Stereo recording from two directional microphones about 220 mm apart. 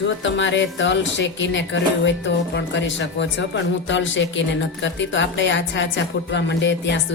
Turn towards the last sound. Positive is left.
turn(degrees=55)  # may be behind; listen again after turning